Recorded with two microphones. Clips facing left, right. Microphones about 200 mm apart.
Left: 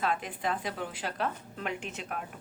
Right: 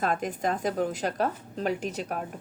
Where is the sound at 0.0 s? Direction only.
45° right (ahead or behind).